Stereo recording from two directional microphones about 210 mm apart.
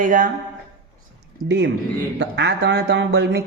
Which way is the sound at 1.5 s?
55° right (ahead or behind).